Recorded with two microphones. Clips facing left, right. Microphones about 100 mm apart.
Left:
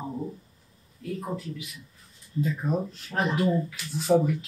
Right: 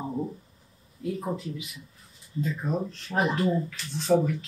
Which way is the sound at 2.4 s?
5° left (ahead or behind).